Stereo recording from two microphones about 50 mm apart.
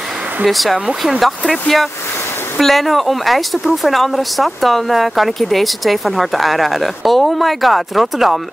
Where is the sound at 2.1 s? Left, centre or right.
Left.